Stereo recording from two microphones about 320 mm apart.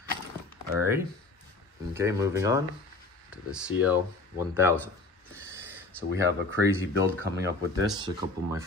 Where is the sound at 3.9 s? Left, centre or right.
Centre.